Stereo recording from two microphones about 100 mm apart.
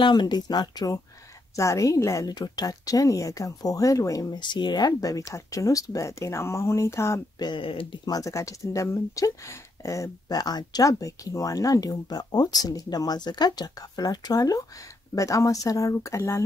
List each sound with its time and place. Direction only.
0.0 s speech: 50° left (ahead or behind)
1.6 s speech: 30° left (ahead or behind)
2.3 s speech: 40° left (ahead or behind)
4.4 s speech: 50° left (ahead or behind); by 7.2 s 30° left (ahead or behind)
7.3 s speech: 45° left (ahead or behind)
7.6 s speech: 65° left (ahead or behind)
8.0 s speech: 35° left (ahead or behind)